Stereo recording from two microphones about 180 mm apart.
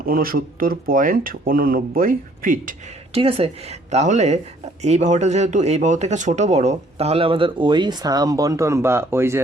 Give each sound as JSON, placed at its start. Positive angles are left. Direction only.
{"t": 0.0, "sound": "speech", "side_deg": -55}
{"t": 3.1, "sound": "speech", "side_deg": -35}